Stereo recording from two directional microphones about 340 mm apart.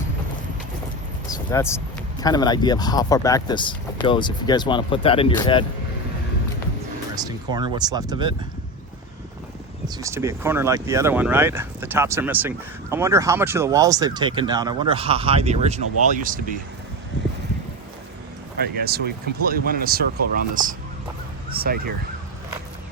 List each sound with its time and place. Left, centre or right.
1.3 s speech: centre
7.2 s speech: centre
9.8 s speech: centre
18.5 s speech: right